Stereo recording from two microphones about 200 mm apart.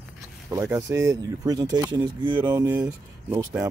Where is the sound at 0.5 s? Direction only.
15° right (ahead or behind).